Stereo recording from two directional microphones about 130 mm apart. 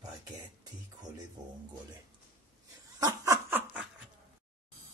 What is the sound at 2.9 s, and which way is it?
Laughter, 25° right (ahead or behind).